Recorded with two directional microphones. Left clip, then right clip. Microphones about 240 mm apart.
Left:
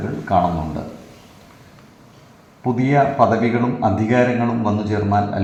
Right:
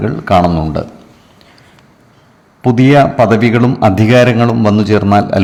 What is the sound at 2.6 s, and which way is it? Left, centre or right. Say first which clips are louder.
Speech: right 9 dB; right.